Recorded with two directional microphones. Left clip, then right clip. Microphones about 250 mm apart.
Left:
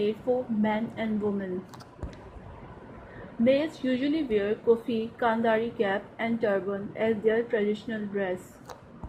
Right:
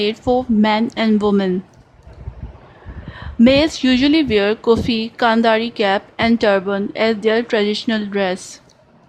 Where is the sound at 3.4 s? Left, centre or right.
Right.